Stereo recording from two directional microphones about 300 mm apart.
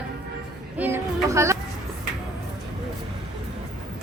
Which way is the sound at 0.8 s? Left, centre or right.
Centre.